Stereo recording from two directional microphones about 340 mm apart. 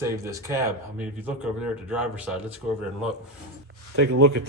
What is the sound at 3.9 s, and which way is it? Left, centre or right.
Speech, right.